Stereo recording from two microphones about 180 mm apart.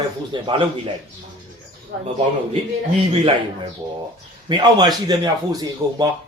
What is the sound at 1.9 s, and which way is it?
Speech, 65° right (ahead or behind).